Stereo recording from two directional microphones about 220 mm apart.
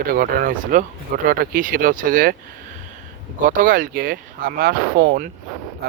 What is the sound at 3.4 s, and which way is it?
A man's voice, 35° right (ahead or behind).